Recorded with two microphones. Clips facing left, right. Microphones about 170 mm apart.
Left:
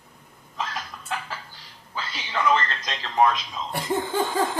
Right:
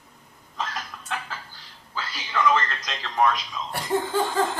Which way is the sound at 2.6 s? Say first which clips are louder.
Left 1 dB; 35° left (ahead or behind).